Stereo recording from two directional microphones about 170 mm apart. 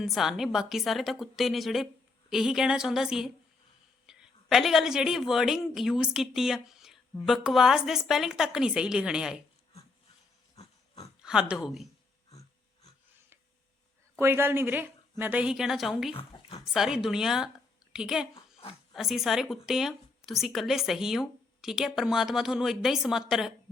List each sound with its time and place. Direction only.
0.0 s a woman's voice: centre (ahead or behind)
10.6 s pig: 35° left (ahead or behind)
11.2 s a woman's voice: 5° right (ahead or behind)
14.2 s a woman's voice: 15° right (ahead or behind)
16.1 s speech: 30° left (ahead or behind)
16.7 s speech: 5° right (ahead or behind)
18.3 s a sound: 35° left (ahead or behind)
18.7 s speech: centre (ahead or behind)